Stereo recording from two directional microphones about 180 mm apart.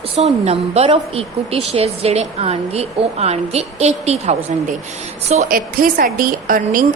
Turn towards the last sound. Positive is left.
turn(degrees=-50)  # may be behind; listen again after turning